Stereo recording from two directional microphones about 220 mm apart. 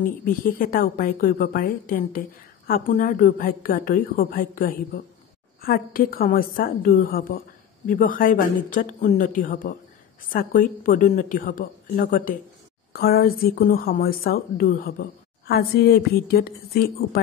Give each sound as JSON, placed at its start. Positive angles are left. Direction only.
{"t": 0.0, "sound": "a woman's voice", "side_deg": 40}